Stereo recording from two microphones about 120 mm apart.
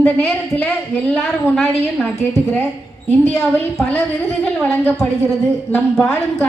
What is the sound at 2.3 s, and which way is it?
Speech, 20° left (ahead or behind).